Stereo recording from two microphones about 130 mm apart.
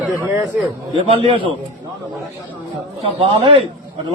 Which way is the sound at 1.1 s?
45° right (ahead or behind).